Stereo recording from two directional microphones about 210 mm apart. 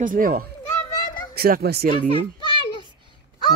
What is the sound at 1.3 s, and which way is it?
Speech, 45° right (ahead or behind).